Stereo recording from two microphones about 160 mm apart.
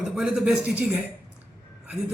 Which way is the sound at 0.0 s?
Centre (ahead or behind).